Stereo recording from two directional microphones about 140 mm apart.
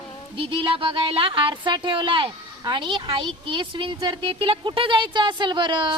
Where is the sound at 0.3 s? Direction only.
40° right (ahead or behind).